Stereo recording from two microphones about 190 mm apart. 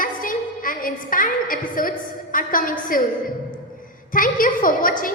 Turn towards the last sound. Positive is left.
turn(degrees=45)  # may be behind; listen again after turning